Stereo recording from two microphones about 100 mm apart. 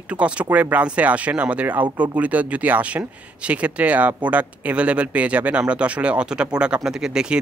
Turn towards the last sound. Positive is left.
turn(degrees=-5)  # may be behind; listen again after turning